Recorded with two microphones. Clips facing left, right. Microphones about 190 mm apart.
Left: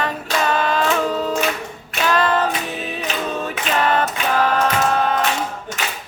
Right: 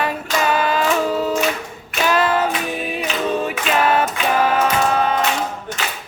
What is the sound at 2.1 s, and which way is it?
A capella, 10° right (ahead or behind).